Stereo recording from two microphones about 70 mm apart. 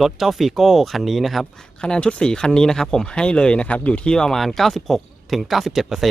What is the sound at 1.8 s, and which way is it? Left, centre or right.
Speech, centre.